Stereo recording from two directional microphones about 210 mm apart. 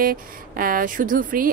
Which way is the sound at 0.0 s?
45° right (ahead or behind).